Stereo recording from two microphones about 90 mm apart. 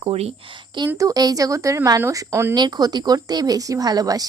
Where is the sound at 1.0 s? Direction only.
40° right (ahead or behind).